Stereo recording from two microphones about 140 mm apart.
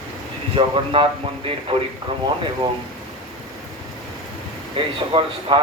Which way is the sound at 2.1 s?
40° right (ahead or behind).